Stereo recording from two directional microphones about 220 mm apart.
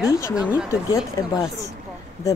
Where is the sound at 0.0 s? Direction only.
15° left (ahead or behind).